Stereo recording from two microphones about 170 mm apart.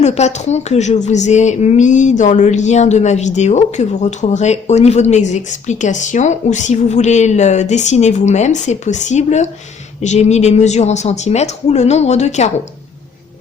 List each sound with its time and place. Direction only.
0.0 s speech: 40° left (ahead or behind)